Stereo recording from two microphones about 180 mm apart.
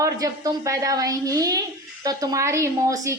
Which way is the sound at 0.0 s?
20° right (ahead or behind).